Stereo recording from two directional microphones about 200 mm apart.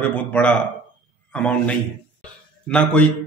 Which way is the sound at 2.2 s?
5° left (ahead or behind).